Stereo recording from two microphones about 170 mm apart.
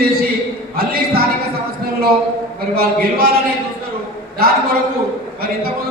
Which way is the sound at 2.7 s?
65° right (ahead or behind).